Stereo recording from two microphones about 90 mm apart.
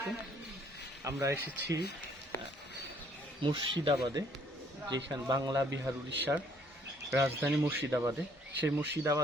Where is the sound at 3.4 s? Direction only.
65° right (ahead or behind).